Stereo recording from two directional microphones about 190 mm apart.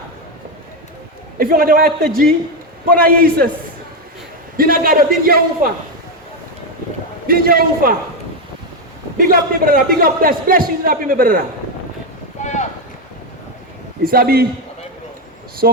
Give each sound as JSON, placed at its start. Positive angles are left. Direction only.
{"t": 1.4, "sound": "speech", "side_deg": -50}
{"t": 4.5, "sound": "speech", "side_deg": -50}
{"t": 7.3, "sound": "speech", "side_deg": -50}
{"t": 9.1, "sound": "speech", "side_deg": -50}
{"t": 12.4, "sound": "clip-clop", "side_deg": 40}
{"t": 14.0, "sound": "speech", "side_deg": -50}
{"t": 15.6, "sound": "speech", "side_deg": -50}